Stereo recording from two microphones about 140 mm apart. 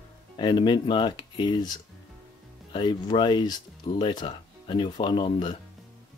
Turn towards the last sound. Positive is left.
turn(degrees=35)  # may be behind; listen again after turning